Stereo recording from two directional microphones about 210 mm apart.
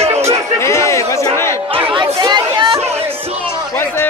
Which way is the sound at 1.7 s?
25° right (ahead or behind).